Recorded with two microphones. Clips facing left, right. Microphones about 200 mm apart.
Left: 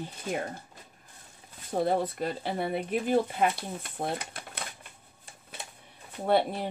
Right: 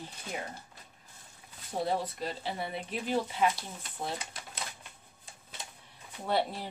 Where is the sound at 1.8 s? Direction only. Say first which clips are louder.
Left 5 dB; 55° left (ahead or behind).